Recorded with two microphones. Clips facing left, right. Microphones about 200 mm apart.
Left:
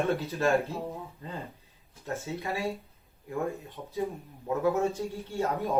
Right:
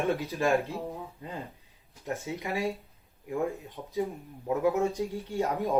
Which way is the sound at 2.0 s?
15° right (ahead or behind).